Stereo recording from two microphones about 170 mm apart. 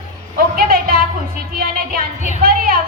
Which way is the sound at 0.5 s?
60° right (ahead or behind).